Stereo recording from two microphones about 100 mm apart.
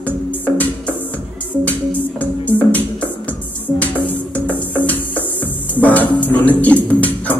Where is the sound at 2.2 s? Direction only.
15° left (ahead or behind).